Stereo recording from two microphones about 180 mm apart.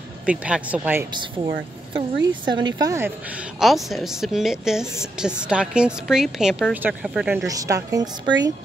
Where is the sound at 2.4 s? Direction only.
25° right (ahead or behind).